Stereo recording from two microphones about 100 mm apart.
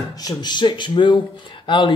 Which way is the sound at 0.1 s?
45° left (ahead or behind).